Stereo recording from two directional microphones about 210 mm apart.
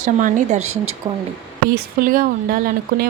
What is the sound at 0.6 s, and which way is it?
Speech, 90° right.